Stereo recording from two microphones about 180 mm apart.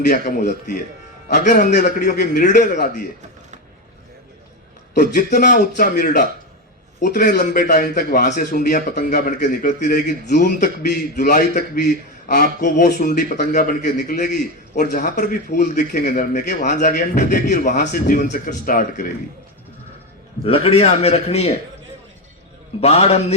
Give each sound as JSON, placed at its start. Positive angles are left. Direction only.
{"t": 0.1, "sound": "a man's voice", "side_deg": 45}
{"t": 4.9, "sound": "a man's voice", "side_deg": 45}
{"t": 20.4, "sound": "a man's voice", "side_deg": 35}
{"t": 22.8, "sound": "a man's voice", "side_deg": 35}